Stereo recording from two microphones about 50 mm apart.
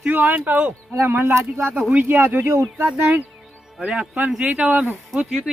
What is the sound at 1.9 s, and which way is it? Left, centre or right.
Speech, right.